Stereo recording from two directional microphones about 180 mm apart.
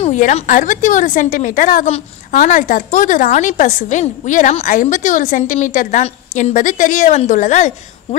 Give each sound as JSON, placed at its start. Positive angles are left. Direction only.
{"t": 0.0, "sound": "a woman's voice", "side_deg": 40}